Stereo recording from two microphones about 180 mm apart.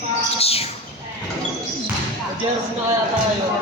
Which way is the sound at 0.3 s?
35° left (ahead or behind).